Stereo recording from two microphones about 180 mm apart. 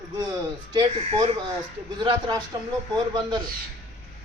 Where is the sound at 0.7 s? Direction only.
25° right (ahead or behind).